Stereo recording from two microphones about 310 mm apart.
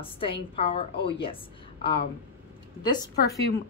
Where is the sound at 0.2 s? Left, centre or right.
Centre.